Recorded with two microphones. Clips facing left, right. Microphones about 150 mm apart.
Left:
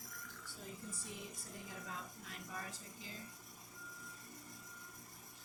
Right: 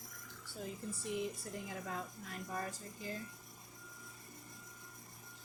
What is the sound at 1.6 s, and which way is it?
A woman's voice, 55° right (ahead or behind).